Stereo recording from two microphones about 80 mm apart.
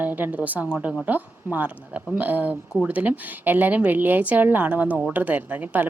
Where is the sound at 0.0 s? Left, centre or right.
Right.